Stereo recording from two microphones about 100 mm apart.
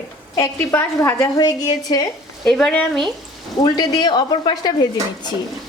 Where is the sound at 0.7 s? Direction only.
25° left (ahead or behind).